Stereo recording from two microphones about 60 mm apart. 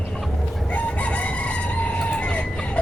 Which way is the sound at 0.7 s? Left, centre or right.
Left.